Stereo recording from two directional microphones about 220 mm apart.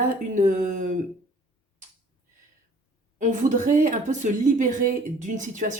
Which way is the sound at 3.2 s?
35° right (ahead or behind).